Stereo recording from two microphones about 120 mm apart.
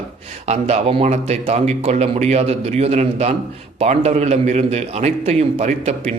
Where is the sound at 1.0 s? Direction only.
65° right (ahead or behind).